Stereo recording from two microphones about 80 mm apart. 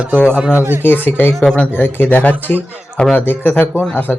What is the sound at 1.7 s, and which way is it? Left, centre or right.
A man's voice, left.